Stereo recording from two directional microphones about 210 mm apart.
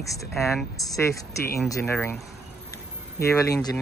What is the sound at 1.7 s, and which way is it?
Speech, 10° left (ahead or behind).